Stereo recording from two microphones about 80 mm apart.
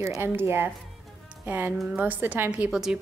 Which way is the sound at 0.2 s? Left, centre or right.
Right.